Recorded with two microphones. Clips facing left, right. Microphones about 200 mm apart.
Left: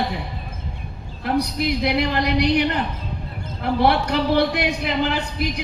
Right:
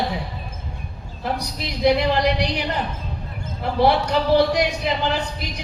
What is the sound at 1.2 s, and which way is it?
A man's voice, 60° left (ahead or behind).